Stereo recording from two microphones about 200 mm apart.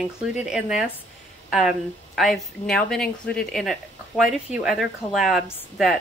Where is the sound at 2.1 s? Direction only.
Centre (ahead or behind).